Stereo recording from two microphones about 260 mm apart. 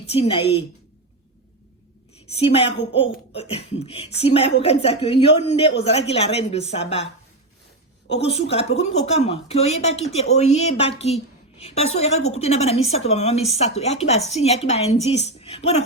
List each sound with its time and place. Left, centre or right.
0.1 s a woman's voice: left
2.3 s a woman's voice: left
8.4 s a woman's voice: left